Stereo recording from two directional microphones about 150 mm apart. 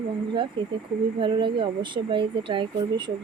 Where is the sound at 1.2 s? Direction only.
35° right (ahead or behind).